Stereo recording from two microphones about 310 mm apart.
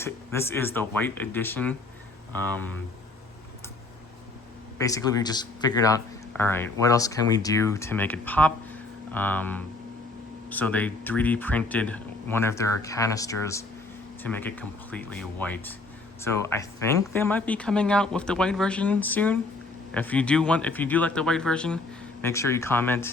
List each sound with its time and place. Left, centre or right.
0.0 s speech: centre
4.8 s speech: centre